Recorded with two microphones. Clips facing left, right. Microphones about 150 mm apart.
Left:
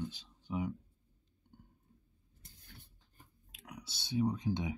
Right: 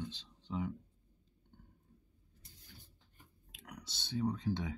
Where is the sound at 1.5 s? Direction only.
10° left (ahead or behind).